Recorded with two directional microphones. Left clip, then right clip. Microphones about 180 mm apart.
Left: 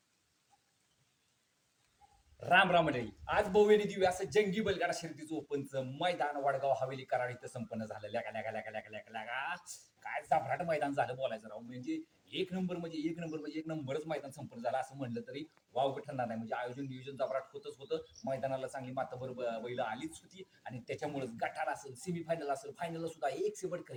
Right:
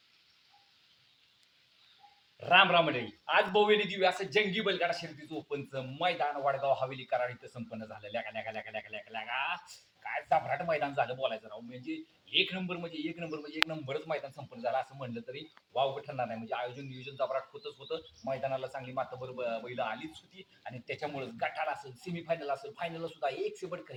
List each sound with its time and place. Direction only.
2.4 s speech: 15° left (ahead or behind)